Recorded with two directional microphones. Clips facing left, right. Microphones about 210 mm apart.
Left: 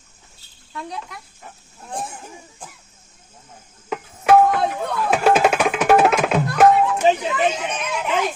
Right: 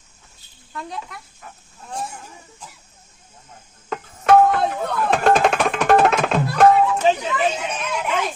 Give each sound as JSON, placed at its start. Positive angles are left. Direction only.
{"t": 0.7, "sound": "speech", "side_deg": 0}
{"t": 2.6, "sound": "a sound", "side_deg": 50}
{"t": 3.8, "sound": "music", "side_deg": 5}